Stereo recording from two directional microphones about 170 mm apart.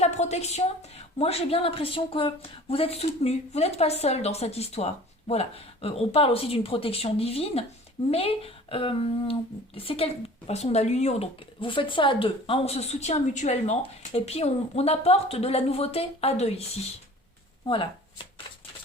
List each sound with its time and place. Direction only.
0.0 s speech: 40° left (ahead or behind)